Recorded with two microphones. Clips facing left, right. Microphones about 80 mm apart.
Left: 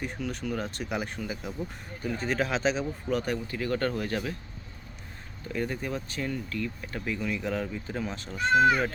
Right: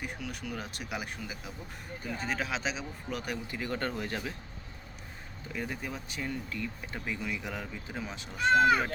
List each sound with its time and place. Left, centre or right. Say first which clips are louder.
0.0 s speech: left 5 dB; centre
3.4 s speech: left 5 dB; centre
5.5 s speech: left 6 dB; centre
6.1 s speech: left 4 dB; centre